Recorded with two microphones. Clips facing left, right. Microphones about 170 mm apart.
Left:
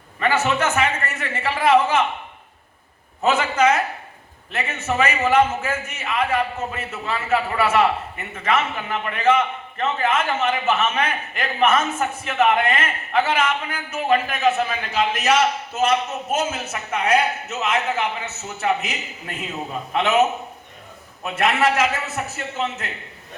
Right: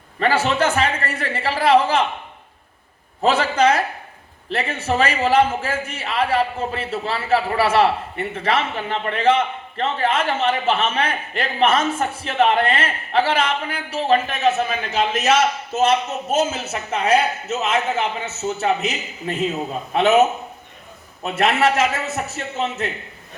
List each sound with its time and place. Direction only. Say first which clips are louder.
0.2 s a man's voice: right 2 dB; 35° right (ahead or behind)
3.2 s a man's voice: right 2 dB; 35° right (ahead or behind)
21.2 s a man's voice: right 2 dB; 25° right (ahead or behind)